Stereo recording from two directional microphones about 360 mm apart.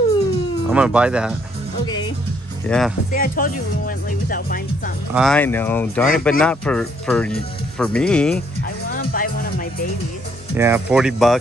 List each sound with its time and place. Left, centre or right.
0.7 s speech: centre
2.7 s speech: centre
3.1 s speech: left
5.1 s speech: centre
8.9 s music: left
10.5 s speech: centre